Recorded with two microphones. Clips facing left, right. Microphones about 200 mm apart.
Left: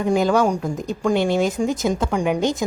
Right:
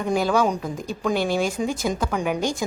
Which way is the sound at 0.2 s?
15° left (ahead or behind).